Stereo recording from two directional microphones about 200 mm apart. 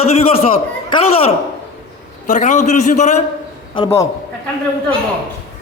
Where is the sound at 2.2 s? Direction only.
40° left (ahead or behind).